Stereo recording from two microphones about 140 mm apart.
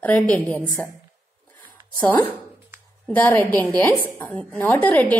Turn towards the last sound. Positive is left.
turn(degrees=10)  # may be behind; listen again after turning